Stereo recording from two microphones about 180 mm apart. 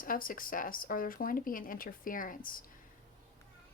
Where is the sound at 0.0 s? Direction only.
50° left (ahead or behind).